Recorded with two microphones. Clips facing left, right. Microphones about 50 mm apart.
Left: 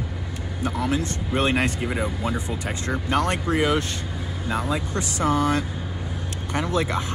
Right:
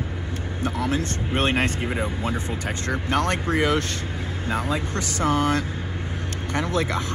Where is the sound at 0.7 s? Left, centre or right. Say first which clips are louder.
Even; left.